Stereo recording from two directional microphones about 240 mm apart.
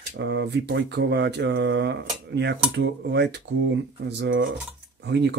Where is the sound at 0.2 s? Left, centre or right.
Right.